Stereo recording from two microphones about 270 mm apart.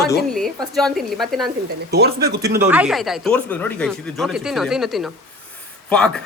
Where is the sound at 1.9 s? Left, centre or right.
Right.